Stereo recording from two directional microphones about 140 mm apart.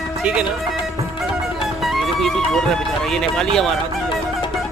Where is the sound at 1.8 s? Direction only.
Centre (ahead or behind).